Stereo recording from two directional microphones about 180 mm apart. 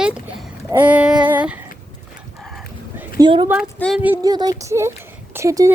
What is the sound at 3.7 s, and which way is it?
Speech, 5° left (ahead or behind).